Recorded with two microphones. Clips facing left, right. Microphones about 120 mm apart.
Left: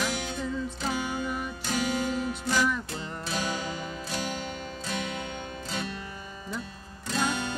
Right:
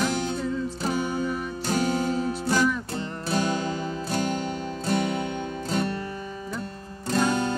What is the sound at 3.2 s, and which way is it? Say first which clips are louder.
Music: right 7 dB; 35° right (ahead or behind).